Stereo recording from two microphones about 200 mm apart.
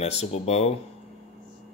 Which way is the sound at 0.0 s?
30° left (ahead or behind).